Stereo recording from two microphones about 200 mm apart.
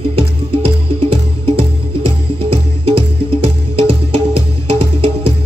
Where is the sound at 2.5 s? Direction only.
25° right (ahead or behind).